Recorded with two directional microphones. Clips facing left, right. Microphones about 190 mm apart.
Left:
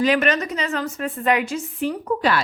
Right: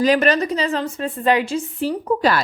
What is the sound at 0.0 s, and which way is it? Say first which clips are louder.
A woman's voice: right 3 dB; 35° right (ahead or behind).